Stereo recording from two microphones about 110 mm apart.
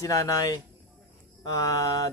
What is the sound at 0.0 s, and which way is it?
Speech, 30° left (ahead or behind).